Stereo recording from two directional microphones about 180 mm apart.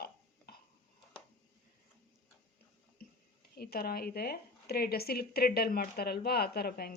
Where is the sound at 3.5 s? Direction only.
60° left (ahead or behind).